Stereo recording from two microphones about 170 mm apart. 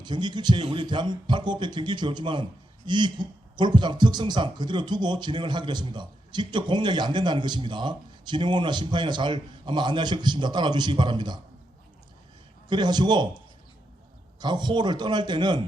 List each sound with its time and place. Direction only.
0.0 s speech: 25° right (ahead or behind)
12.6 s speech: 25° right (ahead or behind)
14.3 s speech: 25° right (ahead or behind)